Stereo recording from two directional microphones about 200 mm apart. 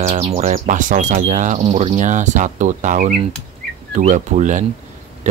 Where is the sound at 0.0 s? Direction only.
30° right (ahead or behind).